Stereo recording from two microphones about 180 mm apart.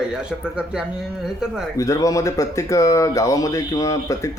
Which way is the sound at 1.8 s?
20° left (ahead or behind).